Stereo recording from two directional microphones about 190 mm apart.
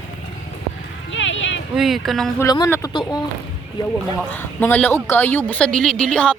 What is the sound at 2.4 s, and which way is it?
Speech, 15° left (ahead or behind).